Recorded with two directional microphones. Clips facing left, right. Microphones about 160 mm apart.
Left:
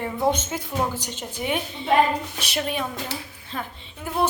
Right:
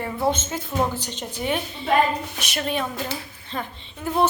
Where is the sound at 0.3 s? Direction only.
10° left (ahead or behind).